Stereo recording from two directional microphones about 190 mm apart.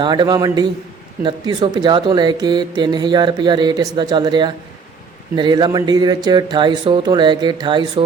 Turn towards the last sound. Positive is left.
turn(degrees=-25)  # may be behind; listen again after turning